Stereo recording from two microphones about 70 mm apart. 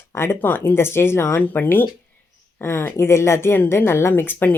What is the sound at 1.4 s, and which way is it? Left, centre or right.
Speech, left.